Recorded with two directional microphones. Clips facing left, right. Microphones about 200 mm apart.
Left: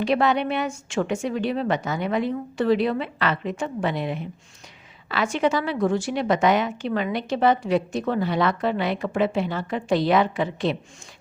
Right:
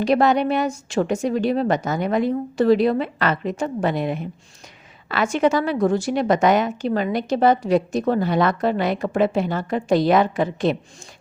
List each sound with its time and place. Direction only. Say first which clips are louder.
0.0 s a woman's voice: right 4 dB; 40° right (ahead or behind)